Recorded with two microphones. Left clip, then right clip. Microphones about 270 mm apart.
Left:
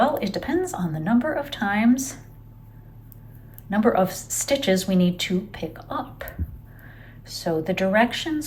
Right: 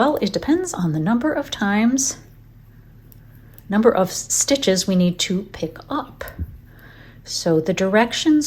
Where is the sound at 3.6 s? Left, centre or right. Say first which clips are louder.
Right 4 dB; centre.